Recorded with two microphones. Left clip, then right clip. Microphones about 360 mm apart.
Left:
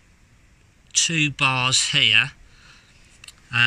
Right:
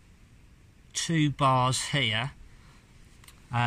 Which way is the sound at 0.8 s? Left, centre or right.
Right.